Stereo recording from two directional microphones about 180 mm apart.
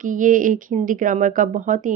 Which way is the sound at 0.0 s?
45° right (ahead or behind).